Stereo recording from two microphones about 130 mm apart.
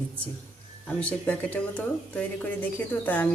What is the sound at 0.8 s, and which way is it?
Speech, 10° left (ahead or behind).